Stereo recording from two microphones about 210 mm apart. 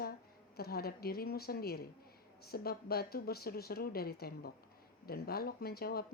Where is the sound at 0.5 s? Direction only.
45° left (ahead or behind).